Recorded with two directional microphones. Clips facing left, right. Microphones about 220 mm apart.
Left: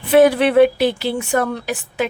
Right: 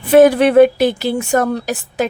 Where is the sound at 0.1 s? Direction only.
45° right (ahead or behind).